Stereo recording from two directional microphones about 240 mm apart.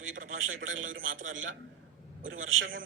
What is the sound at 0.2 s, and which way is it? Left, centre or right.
A man's voice, right.